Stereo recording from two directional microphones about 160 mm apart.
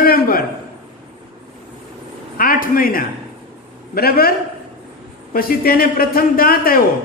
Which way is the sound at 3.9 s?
70° left (ahead or behind).